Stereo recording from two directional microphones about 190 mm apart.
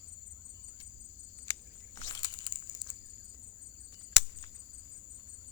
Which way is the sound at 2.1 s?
25° left (ahead or behind).